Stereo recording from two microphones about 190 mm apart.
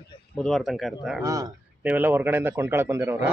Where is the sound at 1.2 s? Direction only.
20° right (ahead or behind).